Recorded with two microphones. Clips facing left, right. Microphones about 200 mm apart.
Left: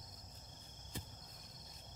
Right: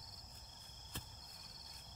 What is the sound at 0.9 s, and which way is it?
Cricket, 10° left (ahead or behind).